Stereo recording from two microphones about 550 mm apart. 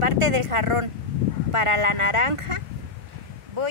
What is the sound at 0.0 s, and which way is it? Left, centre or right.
A woman's voice, right.